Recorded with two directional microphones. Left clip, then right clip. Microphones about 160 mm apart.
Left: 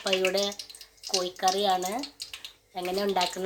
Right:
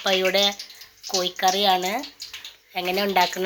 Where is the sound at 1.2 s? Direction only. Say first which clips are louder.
Right 6 dB; 5° right (ahead or behind).